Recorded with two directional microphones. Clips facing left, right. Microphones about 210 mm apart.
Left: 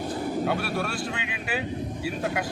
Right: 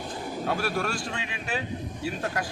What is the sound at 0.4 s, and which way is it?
Speech, 5° left (ahead or behind).